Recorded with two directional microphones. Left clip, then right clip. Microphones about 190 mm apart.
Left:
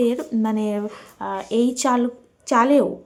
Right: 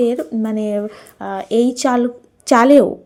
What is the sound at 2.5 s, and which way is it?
Speech, 30° right (ahead or behind).